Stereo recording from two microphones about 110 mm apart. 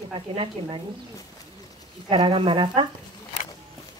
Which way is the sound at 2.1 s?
55° right (ahead or behind).